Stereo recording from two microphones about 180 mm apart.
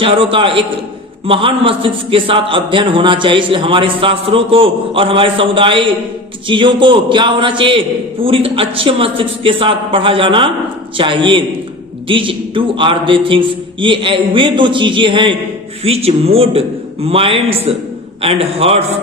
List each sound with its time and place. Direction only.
0.0 s a man's voice: 30° right (ahead or behind)